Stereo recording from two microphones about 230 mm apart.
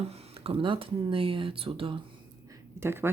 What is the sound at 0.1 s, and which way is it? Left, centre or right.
Speech, right.